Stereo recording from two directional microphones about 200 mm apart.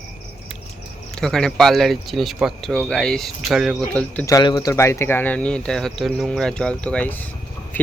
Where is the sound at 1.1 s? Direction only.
5° left (ahead or behind).